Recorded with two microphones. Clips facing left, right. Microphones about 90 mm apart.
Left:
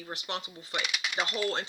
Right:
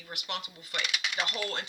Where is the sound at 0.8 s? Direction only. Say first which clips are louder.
Left 1 dB; 5° left (ahead or behind).